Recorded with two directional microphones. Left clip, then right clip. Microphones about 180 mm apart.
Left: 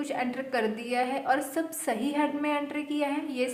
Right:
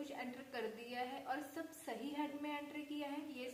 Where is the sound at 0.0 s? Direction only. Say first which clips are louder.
Left 17 dB; 35° left (ahead or behind).